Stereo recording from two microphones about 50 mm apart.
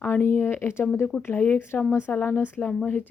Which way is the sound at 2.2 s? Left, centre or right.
Left.